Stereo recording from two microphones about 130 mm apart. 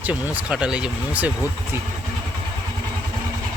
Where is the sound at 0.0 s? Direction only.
10° right (ahead or behind).